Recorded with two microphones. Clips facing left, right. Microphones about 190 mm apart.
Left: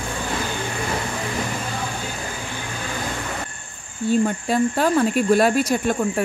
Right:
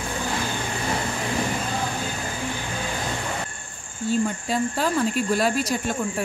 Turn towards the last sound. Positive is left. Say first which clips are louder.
# left 5 dB
turn(degrees=55)  # may be behind; listen again after turning